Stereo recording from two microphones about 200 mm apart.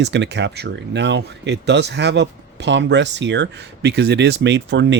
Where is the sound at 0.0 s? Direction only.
60° right (ahead or behind).